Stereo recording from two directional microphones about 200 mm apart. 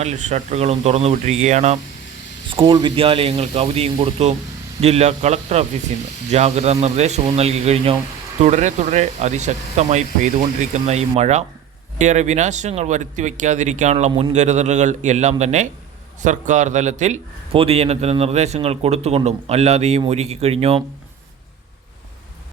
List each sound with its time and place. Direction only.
0.0 s a man's voice: 35° right (ahead or behind)
2.5 s a man's voice: 25° right (ahead or behind)